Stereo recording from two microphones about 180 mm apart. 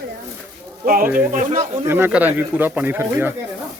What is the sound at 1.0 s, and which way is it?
Speech, 10° right (ahead or behind).